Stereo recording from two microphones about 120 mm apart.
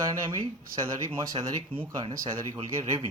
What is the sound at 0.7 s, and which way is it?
Speech, 25° right (ahead or behind).